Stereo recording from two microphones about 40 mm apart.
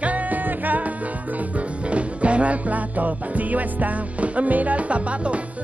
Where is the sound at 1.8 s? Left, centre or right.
Right.